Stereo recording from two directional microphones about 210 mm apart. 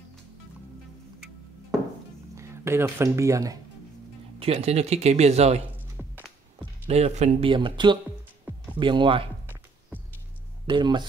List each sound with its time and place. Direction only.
2.3 s speech: 15° right (ahead or behind)
4.4 s speech: 30° right (ahead or behind)
5.9 s music: 5° right (ahead or behind)
6.9 s speech: 30° right (ahead or behind)
10.7 s speech: 20° right (ahead or behind)